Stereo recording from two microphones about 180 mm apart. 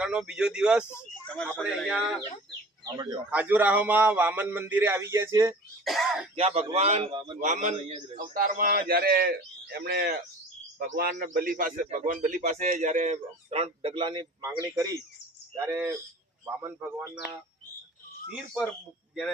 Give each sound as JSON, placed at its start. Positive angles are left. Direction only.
{"t": 0.0, "sound": "speech", "side_deg": -5}
{"t": 2.8, "sound": "a man's voice", "side_deg": -25}
{"t": 3.2, "sound": "a man's voice", "side_deg": -10}
{"t": 5.8, "sound": "speech", "side_deg": 0}
{"t": 6.3, "sound": "a man's voice", "side_deg": -35}
{"t": 7.3, "sound": "a man's voice", "side_deg": -45}